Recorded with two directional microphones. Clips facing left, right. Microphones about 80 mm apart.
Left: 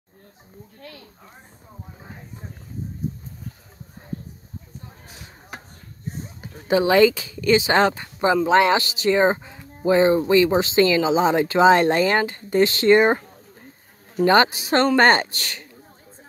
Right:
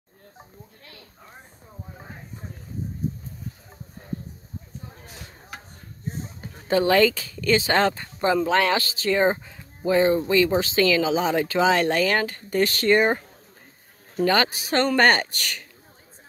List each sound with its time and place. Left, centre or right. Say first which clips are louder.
6.4 s speech: left 2 dB; centre
14.2 s speech: left 5 dB; left